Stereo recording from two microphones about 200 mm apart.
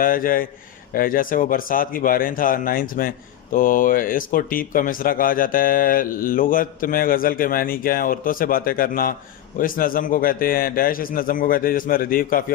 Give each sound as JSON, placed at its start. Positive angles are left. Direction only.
{"t": 0.0, "sound": "speech", "side_deg": 45}